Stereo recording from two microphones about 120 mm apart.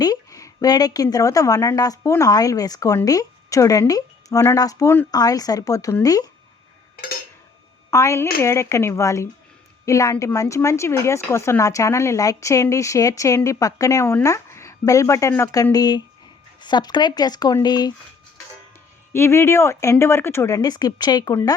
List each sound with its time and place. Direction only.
0.0 s a woman's voice: 30° left (ahead or behind)
7.9 s speech: 25° left (ahead or behind)
19.1 s speech: 20° left (ahead or behind)